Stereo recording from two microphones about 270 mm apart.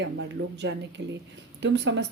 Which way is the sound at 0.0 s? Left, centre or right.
Right.